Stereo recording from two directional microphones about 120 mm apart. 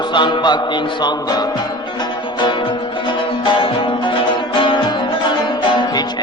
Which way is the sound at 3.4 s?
45° left (ahead or behind).